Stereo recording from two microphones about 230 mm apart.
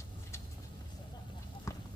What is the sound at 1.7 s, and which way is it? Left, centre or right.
Duck, centre.